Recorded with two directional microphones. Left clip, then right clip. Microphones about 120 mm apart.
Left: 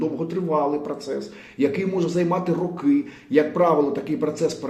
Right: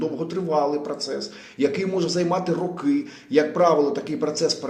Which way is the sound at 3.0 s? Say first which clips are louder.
Even; 30° left (ahead or behind).